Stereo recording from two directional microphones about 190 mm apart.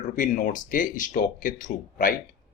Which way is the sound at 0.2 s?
45° left (ahead or behind).